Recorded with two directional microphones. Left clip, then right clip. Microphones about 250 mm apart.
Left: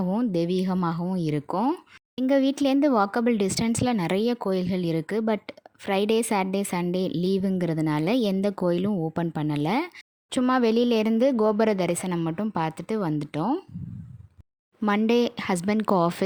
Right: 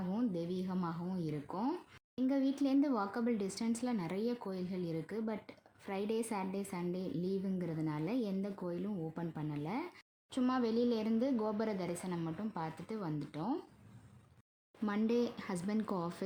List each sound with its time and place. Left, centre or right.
0.1 s speech: left
14.8 s speech: left